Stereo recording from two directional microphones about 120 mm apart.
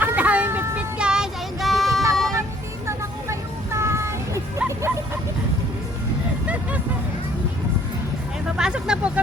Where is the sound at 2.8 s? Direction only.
25° right (ahead or behind).